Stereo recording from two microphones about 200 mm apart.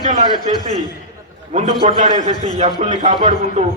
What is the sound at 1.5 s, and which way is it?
A man's voice, 40° right (ahead or behind).